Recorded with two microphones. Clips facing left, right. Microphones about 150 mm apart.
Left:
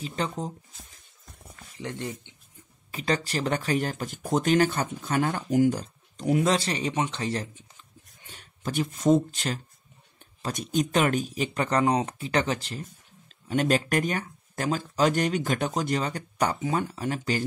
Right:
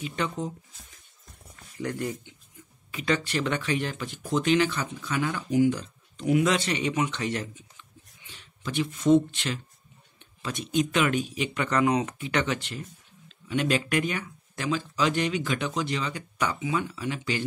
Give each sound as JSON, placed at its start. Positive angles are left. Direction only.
{"t": 0.0, "sound": "speech", "side_deg": 35}
{"t": 1.8, "sound": "speech", "side_deg": 25}
{"t": 2.9, "sound": "speech", "side_deg": 35}
{"t": 8.2, "sound": "speech", "side_deg": 45}